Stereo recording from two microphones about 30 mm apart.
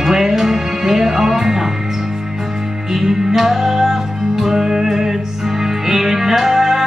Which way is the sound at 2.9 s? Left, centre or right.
Centre.